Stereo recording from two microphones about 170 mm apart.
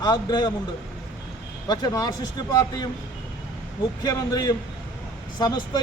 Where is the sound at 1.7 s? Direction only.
25° left (ahead or behind).